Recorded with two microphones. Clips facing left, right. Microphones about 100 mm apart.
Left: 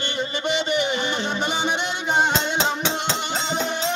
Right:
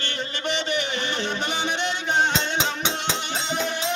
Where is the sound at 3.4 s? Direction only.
25° left (ahead or behind).